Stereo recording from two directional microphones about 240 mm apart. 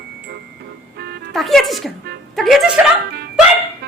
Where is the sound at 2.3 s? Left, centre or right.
Centre.